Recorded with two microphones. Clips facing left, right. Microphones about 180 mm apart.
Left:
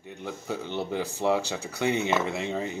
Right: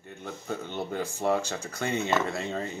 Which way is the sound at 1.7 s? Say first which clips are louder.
Left 3 dB; 10° left (ahead or behind).